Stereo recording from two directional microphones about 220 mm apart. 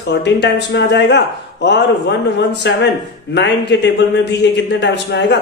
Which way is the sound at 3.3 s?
50° left (ahead or behind).